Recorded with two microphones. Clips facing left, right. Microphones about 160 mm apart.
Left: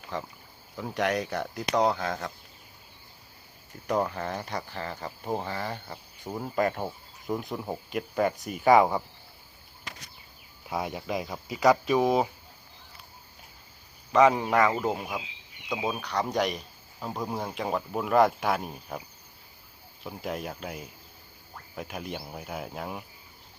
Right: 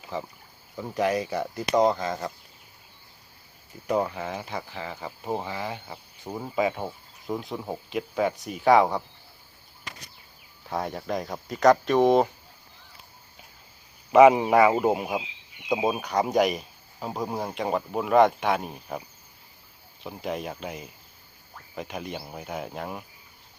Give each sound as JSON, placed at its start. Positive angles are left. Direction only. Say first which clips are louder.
{"t": 0.1, "sound": "speech", "louder": "right 2 dB", "side_deg": -5}
{"t": 3.8, "sound": "speech", "louder": "right 2 dB", "side_deg": -5}
{"t": 10.7, "sound": "speech", "louder": "right 2 dB", "side_deg": 5}
{"t": 14.1, "sound": "speech", "louder": "right 6 dB", "side_deg": -15}
{"t": 20.1, "sound": "speech", "louder": "right 2 dB", "side_deg": 0}